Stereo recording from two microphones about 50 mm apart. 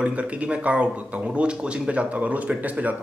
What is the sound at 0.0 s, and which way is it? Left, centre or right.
A man's voice, right.